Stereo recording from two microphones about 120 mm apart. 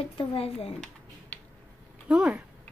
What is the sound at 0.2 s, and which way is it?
Speech, 50° left (ahead or behind).